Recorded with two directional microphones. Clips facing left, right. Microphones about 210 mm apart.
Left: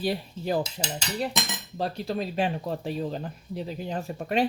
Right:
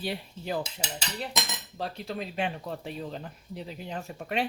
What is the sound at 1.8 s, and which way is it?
Speech, 35° left (ahead or behind).